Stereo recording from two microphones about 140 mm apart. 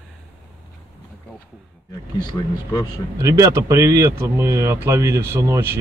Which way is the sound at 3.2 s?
25° right (ahead or behind).